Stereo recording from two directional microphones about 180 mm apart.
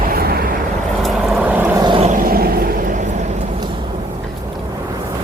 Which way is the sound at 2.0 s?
50° right (ahead or behind).